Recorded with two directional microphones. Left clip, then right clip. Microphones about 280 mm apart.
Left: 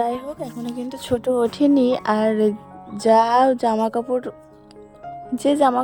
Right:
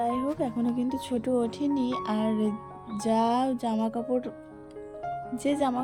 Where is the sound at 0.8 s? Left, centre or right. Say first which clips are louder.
Left 6 dB; centre.